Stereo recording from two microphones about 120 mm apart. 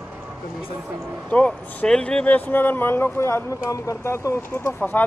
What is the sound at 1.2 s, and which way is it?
Speech, 10° left (ahead or behind).